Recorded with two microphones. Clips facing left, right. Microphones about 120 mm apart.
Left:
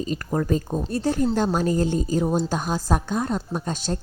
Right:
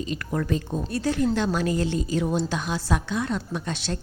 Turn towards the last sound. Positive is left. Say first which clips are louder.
# left 3 dB
turn(degrees=40)  # may be behind; listen again after turning